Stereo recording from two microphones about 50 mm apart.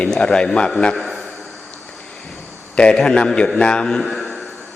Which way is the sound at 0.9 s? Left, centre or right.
Centre.